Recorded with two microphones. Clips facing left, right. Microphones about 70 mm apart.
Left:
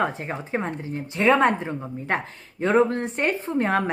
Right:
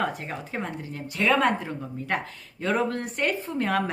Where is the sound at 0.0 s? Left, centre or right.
Left.